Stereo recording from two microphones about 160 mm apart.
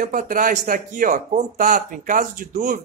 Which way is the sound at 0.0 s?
60° right (ahead or behind).